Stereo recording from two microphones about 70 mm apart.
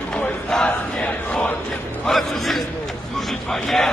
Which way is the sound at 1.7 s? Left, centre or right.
Centre.